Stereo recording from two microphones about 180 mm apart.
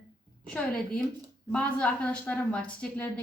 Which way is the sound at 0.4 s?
5° left (ahead or behind).